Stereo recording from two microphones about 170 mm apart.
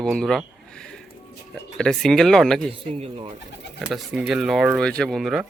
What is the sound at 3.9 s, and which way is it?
Speech, centre (ahead or behind).